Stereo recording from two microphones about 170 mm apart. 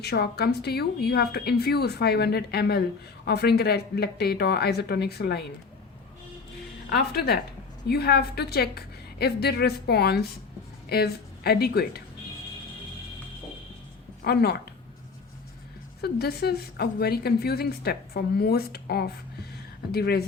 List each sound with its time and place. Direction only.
0.0 s a woman's voice: 70° left (ahead or behind)
6.9 s a woman's voice: 70° left (ahead or behind)
14.3 s a woman's voice: 70° left (ahead or behind)
16.0 s a woman's voice: 70° left (ahead or behind)